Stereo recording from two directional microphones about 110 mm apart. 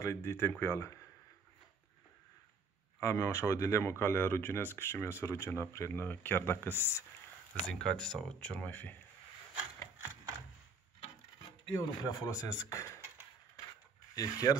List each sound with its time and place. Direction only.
0.0 s speech: 25° left (ahead or behind)
3.0 s speech: 25° left (ahead or behind)
7.6 s speech: 5° left (ahead or behind)
11.7 s speech: 30° left (ahead or behind)
14.1 s speech: 35° left (ahead or behind)